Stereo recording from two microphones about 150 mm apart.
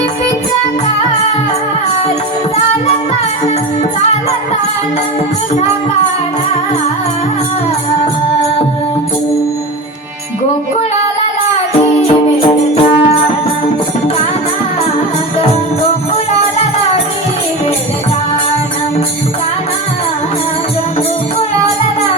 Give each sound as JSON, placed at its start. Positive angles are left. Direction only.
{"t": 11.9, "sound": "music", "side_deg": 40}